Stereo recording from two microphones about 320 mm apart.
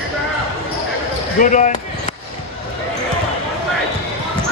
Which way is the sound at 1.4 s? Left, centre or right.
Left.